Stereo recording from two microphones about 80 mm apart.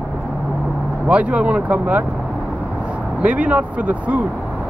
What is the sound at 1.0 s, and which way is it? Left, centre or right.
Speech, centre.